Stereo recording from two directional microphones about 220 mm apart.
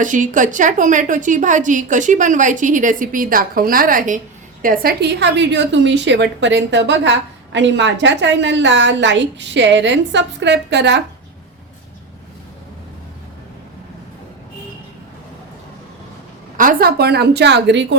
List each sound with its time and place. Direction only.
0.0 s a woman's voice: 35° right (ahead or behind); by 11.0 s 50° right (ahead or behind)
16.6 s a woman's voice: 40° right (ahead or behind)